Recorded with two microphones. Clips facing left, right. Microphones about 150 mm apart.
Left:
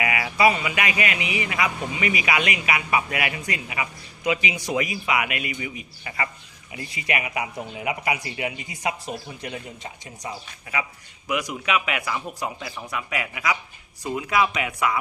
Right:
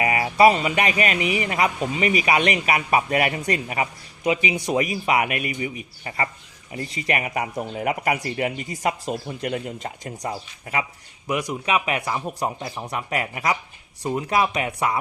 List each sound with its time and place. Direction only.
0.0 s speech: 35° right (ahead or behind)
4.2 s speech: 25° right (ahead or behind)
4.7 s speech: 35° right (ahead or behind)
11.6 s speech: 35° right (ahead or behind)